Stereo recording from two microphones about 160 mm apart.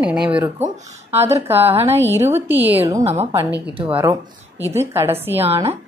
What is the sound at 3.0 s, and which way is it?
Speech, 40° right (ahead or behind).